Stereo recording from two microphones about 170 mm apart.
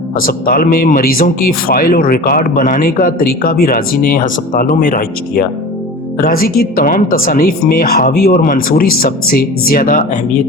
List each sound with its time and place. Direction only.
0.2 s speech: 55° left (ahead or behind)